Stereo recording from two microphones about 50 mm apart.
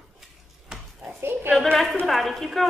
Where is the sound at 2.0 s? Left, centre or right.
Centre.